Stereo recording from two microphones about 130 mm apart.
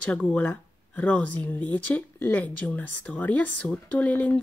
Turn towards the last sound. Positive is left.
turn(degrees=10)  # may be behind; listen again after turning